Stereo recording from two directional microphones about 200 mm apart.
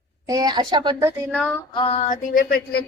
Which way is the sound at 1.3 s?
5° left (ahead or behind).